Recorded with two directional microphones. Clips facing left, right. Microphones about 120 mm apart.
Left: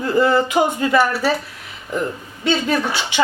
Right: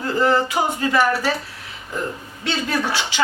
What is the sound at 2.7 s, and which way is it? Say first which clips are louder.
Speech: left 3 dB; 15° left (ahead or behind).